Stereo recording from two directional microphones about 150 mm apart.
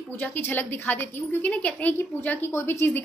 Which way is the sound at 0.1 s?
15° left (ahead or behind).